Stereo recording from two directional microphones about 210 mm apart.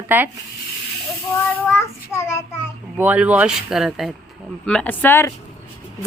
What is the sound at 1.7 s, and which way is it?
Child singing, 10° left (ahead or behind).